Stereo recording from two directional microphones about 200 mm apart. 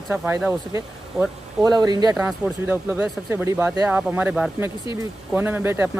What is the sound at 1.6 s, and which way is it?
Speech, 20° right (ahead or behind).